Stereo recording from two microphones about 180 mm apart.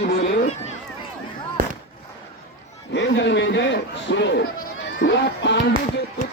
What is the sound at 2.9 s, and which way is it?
Speech, 80° left.